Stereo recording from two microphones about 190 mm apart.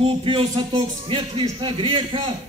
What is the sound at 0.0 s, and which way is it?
A man's voice, 30° right (ahead or behind).